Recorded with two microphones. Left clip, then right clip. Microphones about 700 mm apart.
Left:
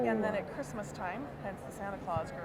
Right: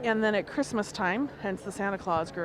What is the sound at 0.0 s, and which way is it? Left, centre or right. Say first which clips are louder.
Speech: right 5 dB; right.